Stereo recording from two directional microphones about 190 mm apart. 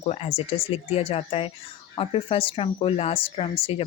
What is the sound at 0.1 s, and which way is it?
A woman's voice, 35° left (ahead or behind).